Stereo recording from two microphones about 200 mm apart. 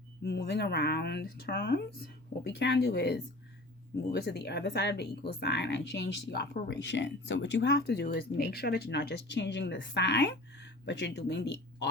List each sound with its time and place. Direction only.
0.2 s speech: 55° left (ahead or behind)